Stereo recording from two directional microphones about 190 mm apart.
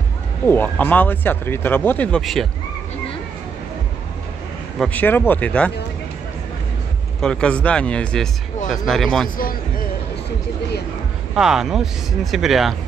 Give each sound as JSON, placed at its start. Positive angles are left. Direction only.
{"t": 0.5, "sound": "speech", "side_deg": 10}
{"t": 4.7, "sound": "speech", "side_deg": 10}
{"t": 7.2, "sound": "speech", "side_deg": 5}
{"t": 9.4, "sound": "speech", "side_deg": 50}
{"t": 11.3, "sound": "speech", "side_deg": -5}